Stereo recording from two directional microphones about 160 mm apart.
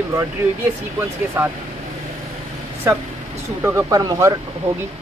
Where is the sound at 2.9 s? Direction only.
15° right (ahead or behind).